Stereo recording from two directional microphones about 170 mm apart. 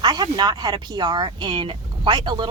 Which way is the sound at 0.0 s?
25° right (ahead or behind).